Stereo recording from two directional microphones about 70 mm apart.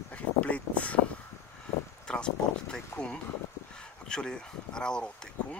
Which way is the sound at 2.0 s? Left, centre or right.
Centre.